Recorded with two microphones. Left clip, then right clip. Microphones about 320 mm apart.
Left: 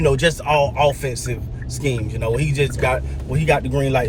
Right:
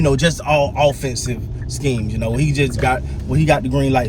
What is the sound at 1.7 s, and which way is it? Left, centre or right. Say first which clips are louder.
A man's voice: right 2 dB; centre.